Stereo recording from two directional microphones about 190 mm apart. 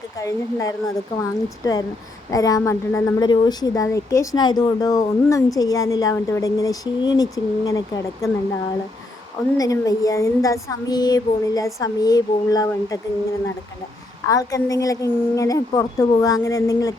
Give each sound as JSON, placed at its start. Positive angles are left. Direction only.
{"t": 0.2, "sound": "a woman's voice", "side_deg": 15}
{"t": 9.6, "sound": "a woman's voice", "side_deg": 20}
{"t": 14.3, "sound": "a woman's voice", "side_deg": 20}